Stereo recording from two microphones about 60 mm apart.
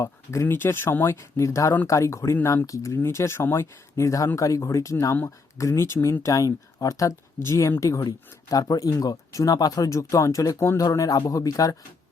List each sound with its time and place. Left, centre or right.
0.0 s speech: left
0.4 s speech: left
3.0 s speech: left
7.8 s speech: left
8.4 s speech: left
8.9 s speech: left